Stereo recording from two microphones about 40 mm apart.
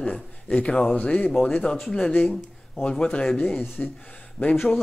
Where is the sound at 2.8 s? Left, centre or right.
Left.